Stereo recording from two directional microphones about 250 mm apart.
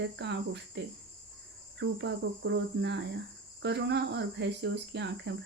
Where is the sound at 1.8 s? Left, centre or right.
Right.